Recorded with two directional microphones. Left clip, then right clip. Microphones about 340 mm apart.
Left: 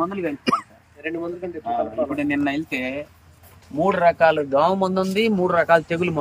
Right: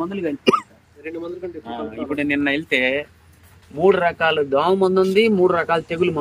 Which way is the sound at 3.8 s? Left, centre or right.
Centre.